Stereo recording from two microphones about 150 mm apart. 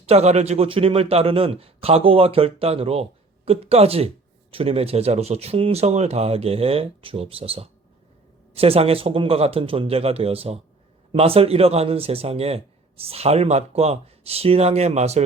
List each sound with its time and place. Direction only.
0.0 s a man's voice: 45° right (ahead or behind)